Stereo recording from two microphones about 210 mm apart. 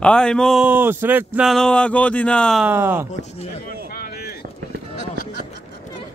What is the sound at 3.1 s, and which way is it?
Speech, 30° left (ahead or behind).